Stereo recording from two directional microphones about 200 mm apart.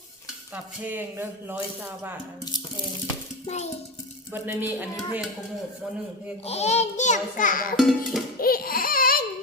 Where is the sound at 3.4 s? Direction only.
35° left (ahead or behind).